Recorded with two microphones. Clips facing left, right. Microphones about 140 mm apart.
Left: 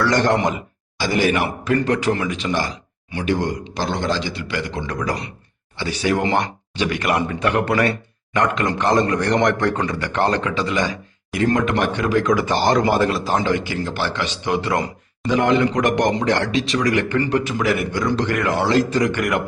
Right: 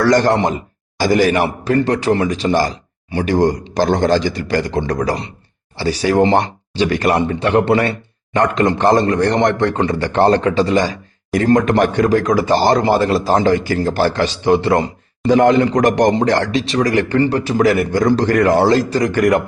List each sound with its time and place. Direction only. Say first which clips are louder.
0.0 s speech: right 4 dB; 40° right (ahead or behind)